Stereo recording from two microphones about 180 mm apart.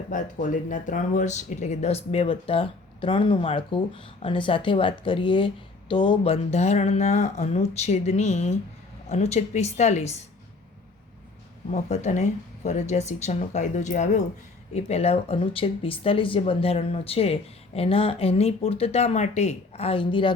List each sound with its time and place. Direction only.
0.1 s speech: 45° left (ahead or behind)
11.7 s speech: 40° left (ahead or behind)